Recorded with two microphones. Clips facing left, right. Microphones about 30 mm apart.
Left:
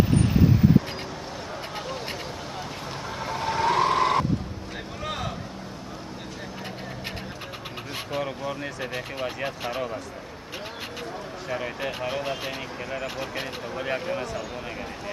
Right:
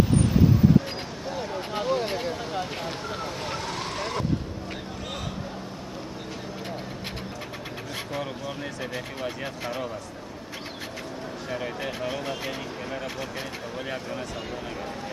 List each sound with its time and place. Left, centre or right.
1.8 s vehicle: centre
3.3 s vehicle: centre
3.5 s vehicle: left
3.9 s vehicle: left
8.8 s speech: centre
11.4 s speech: centre